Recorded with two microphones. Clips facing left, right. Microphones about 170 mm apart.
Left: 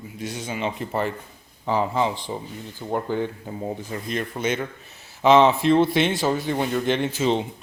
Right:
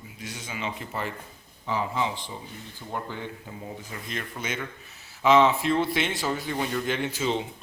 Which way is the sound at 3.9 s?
35° left (ahead or behind).